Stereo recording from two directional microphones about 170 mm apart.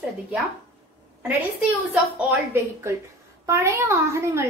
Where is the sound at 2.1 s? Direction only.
15° right (ahead or behind).